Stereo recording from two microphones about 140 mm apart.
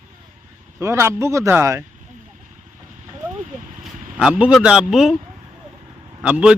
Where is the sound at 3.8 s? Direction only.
5° right (ahead or behind).